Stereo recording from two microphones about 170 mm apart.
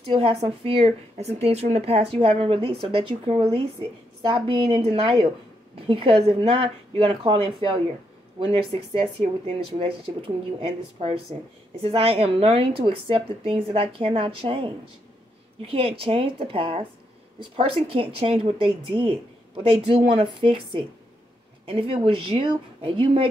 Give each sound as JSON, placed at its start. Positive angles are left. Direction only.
{"t": 0.0, "sound": "a woman's voice", "side_deg": -35}